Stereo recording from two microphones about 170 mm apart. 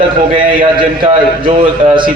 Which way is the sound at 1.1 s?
35° right (ahead or behind).